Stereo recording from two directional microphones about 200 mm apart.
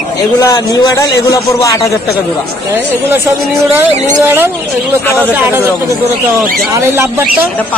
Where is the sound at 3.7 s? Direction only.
10° right (ahead or behind).